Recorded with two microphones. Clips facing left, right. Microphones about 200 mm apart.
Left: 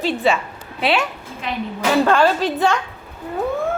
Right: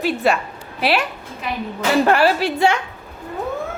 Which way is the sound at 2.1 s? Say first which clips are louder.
Even; 10° right (ahead or behind).